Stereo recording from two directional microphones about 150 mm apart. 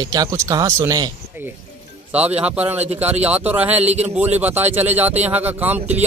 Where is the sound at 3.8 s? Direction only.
45° right (ahead or behind).